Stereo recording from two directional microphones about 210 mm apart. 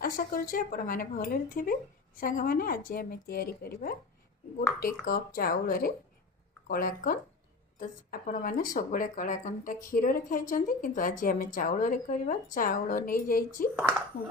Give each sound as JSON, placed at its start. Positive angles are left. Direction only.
{"t": 0.0, "sound": "speech", "side_deg": 45}